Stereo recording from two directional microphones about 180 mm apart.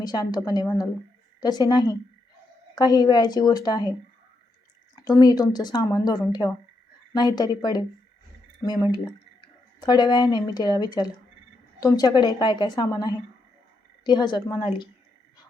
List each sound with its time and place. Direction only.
0.0 s speech: 20° left (ahead or behind)
4.9 s speech: 20° left (ahead or behind)